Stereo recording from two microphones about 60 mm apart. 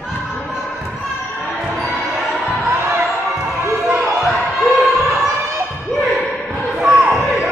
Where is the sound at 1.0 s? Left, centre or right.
Centre.